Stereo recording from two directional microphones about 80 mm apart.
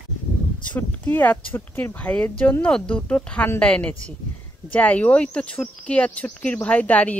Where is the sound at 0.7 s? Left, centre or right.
Left.